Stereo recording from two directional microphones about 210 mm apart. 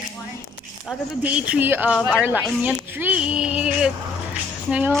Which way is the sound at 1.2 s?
5° right (ahead or behind).